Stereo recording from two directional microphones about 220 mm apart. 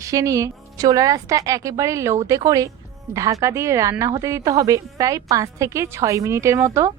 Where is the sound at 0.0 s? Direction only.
15° right (ahead or behind).